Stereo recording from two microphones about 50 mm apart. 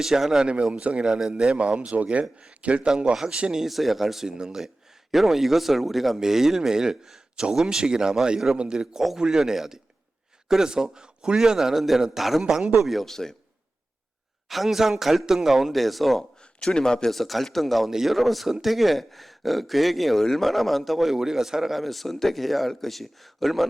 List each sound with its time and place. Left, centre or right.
0.0 s speech: centre
0.4 s speech: right
12.8 s speech: centre
14.5 s speech: centre
16.6 s speech: centre